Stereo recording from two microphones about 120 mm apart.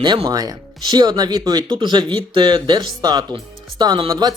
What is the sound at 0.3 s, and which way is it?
Speech, 30° right (ahead or behind).